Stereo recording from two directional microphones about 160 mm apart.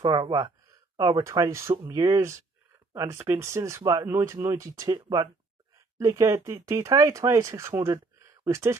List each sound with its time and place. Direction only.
0.0 s speech: 25° right (ahead or behind)